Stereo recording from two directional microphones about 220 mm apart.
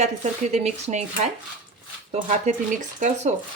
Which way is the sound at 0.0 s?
30° right (ahead or behind).